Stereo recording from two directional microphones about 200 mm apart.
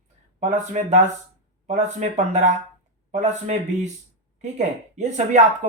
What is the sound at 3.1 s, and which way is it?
Speech, 35° right (ahead or behind).